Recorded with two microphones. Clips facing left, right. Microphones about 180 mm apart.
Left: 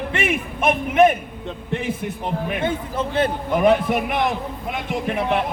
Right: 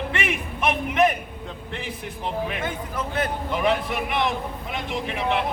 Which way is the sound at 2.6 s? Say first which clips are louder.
Left 6 dB; 30° left (ahead or behind).